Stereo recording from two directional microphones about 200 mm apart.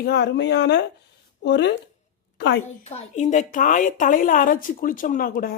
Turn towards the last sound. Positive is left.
turn(degrees=45)  # may be behind; listen again after turning